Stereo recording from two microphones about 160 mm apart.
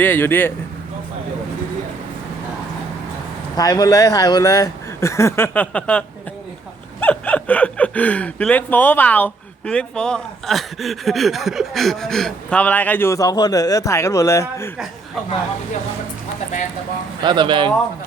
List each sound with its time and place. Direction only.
0.0 s speech: 15° left (ahead or behind)
3.6 s speech: 20° left (ahead or behind)
17.2 s speech: 30° right (ahead or behind)